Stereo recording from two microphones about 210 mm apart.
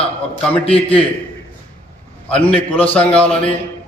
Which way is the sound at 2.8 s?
25° left (ahead or behind).